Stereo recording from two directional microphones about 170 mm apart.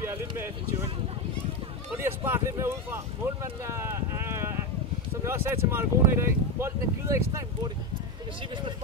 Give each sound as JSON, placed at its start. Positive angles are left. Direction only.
{"t": 2.0, "sound": "speech", "side_deg": -15}
{"t": 3.4, "sound": "clip-clop", "side_deg": -15}
{"t": 5.2, "sound": "speech", "side_deg": -15}